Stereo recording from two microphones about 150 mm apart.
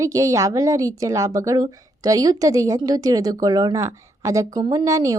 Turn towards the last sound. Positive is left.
turn(degrees=-20)  # may be behind; listen again after turning